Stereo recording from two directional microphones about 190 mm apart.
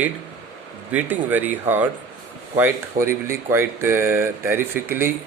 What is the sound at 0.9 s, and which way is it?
Speech, 10° right (ahead or behind).